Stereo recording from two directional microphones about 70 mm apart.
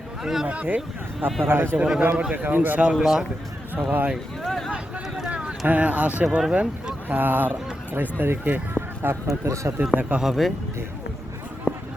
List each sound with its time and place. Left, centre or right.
0.2 s speech: centre
0.4 s a man's voice: right
1.5 s a man's voice: right
1.8 s speech: centre
2.3 s a man's voice: right
3.0 s speech: centre
3.8 s a man's voice: right
4.4 s speech: centre
5.3 s speech: centre
6.2 s speech: centre
6.5 s speech: centre
9.2 s speech: right
10.2 s speech: centre
11.7 s a sound: left